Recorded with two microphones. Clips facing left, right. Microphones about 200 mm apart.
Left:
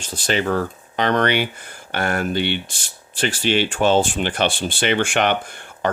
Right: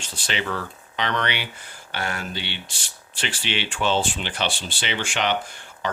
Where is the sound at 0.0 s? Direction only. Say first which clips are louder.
Left 8 dB; 40° left (ahead or behind).